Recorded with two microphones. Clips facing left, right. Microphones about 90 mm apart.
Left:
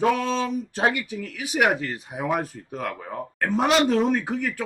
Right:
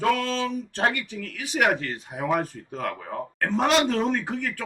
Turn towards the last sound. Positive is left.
turn(degrees=10)  # may be behind; listen again after turning